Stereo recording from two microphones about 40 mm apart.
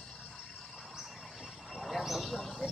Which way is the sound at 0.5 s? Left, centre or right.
Centre.